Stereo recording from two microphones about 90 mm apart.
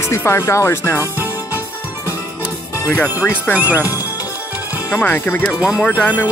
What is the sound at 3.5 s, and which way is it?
Speech, 25° left (ahead or behind).